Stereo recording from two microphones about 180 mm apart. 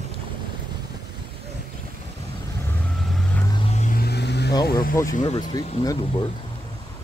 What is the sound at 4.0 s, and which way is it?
Vehicle, 65° left (ahead or behind).